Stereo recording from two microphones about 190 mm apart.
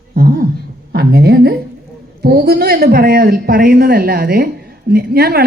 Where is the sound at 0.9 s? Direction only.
55° right (ahead or behind).